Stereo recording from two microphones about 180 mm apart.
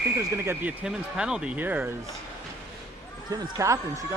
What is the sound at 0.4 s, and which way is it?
Speech, 5° right (ahead or behind).